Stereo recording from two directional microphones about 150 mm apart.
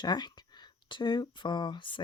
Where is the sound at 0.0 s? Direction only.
30° left (ahead or behind).